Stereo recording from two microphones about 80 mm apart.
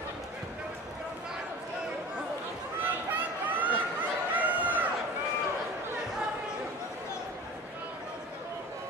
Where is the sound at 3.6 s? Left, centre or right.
Right.